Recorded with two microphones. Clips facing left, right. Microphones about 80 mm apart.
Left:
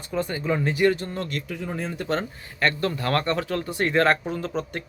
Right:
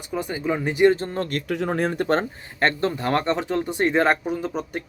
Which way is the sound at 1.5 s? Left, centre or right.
Right.